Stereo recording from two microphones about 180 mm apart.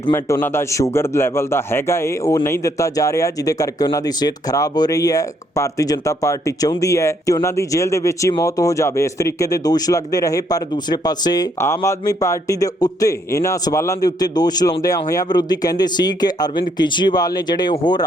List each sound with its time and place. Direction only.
0.0 s speech: 15° left (ahead or behind)